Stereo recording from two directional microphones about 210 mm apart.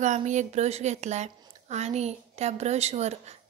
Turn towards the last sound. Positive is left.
turn(degrees=-30)  # may be behind; listen again after turning